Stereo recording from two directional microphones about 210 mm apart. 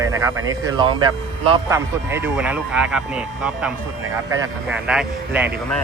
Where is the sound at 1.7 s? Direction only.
10° right (ahead or behind).